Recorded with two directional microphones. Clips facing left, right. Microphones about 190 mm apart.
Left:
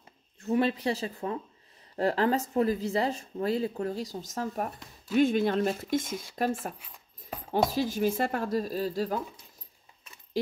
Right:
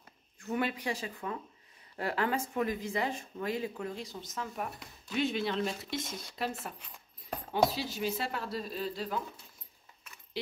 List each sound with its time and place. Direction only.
0.4 s speech: 30° left (ahead or behind)
7.7 s speech: 45° left (ahead or behind)